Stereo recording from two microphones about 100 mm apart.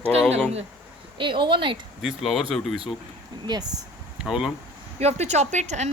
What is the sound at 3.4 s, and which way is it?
Speech, 45° right (ahead or behind).